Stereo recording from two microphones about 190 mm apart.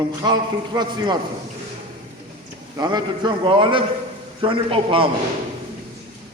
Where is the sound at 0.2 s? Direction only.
20° right (ahead or behind).